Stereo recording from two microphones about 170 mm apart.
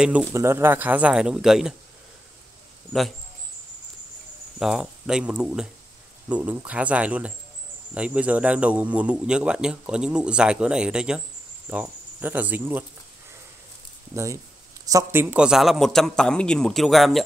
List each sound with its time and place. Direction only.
0.0 s speech: 10° right (ahead or behind)
4.6 s speech: 5° right (ahead or behind)
11.7 s cricket: 10° right (ahead or behind)
14.1 s speech: 20° right (ahead or behind); by 17.2 s centre (ahead or behind)